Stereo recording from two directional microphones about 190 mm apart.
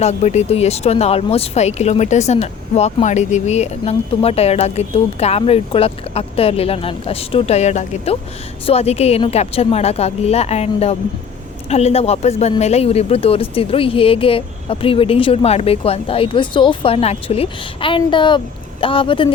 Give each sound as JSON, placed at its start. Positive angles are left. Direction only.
{"t": 0.0, "sound": "speech", "side_deg": 35}